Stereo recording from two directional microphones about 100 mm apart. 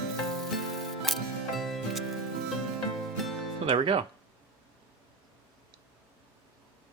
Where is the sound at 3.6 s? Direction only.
60° right (ahead or behind).